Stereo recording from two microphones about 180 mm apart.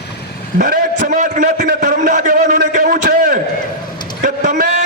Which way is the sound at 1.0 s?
45° right (ahead or behind).